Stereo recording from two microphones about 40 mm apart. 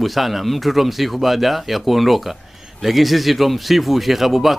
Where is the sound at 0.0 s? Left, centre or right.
Centre.